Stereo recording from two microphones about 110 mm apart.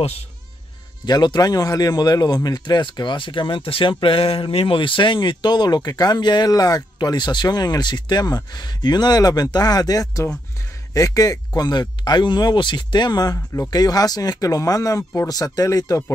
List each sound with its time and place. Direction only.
1.0 s speech: 40° left (ahead or behind)